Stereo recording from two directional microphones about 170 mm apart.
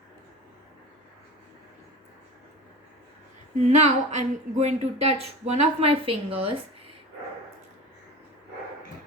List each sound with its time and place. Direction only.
3.6 s speech: 40° right (ahead or behind)